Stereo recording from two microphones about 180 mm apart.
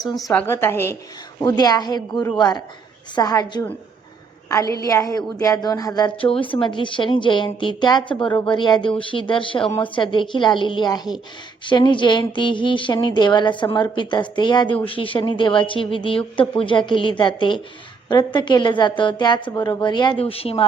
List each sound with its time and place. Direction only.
0.3 s a woman's voice: 15° left (ahead or behind)
3.2 s a woman's voice: 20° left (ahead or behind)